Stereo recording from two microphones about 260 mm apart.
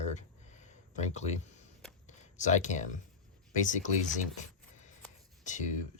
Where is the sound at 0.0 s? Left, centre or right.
Left.